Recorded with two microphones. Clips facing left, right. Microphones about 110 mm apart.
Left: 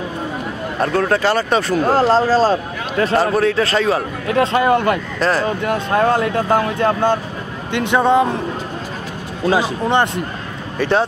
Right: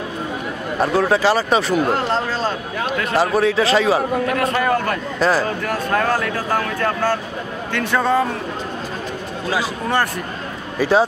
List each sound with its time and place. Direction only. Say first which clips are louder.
0.7 s speech: even; 5° right (ahead or behind)
1.9 s speech: left 6 dB; 35° left (ahead or behind)
3.2 s speech: right 1 dB; centre (ahead or behind)
4.4 s speech: left 9 dB; 25° left (ahead or behind)
5.2 s speech: right 1 dB; centre (ahead or behind)
5.6 s speech: left 3 dB; 20° left (ahead or behind)
9.5 s speech: left 5 dB; 20° left (ahead or behind)
10.8 s speech: right 1 dB; 5° right (ahead or behind)